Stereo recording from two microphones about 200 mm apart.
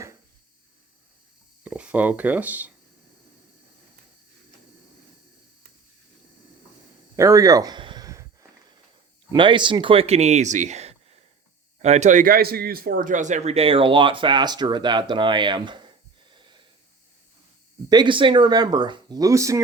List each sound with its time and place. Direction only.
1.6 s speech: 5° right (ahead or behind)
7.2 s a sound: 15° right (ahead or behind)
9.3 s speech: 25° right (ahead or behind)
16.3 s wheeze: 25° right (ahead or behind)
17.8 s speech: 20° right (ahead or behind)